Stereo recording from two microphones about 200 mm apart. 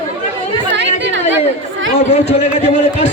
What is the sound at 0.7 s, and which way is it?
Chatter, 65° right (ahead or behind).